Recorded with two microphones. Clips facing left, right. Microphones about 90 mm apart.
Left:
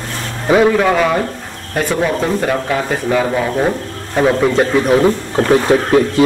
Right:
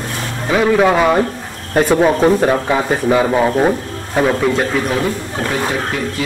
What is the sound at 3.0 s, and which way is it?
Speech, 10° right (ahead or behind).